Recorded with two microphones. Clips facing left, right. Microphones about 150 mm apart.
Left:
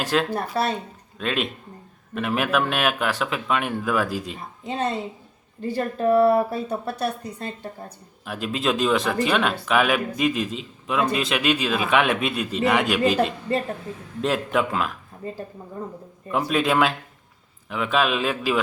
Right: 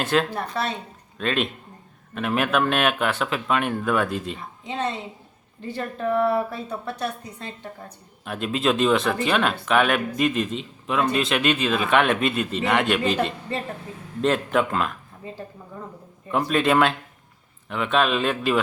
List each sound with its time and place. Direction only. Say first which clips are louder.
0.0 s speech: even; centre (ahead or behind)
4.6 s speech: left 2 dB; 40° left (ahead or behind)
8.2 s speech: right 2 dB; centre (ahead or behind)
16.3 s speech: right 1 dB; centre (ahead or behind)